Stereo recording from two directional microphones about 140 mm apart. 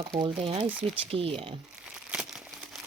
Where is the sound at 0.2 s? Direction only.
35° right (ahead or behind).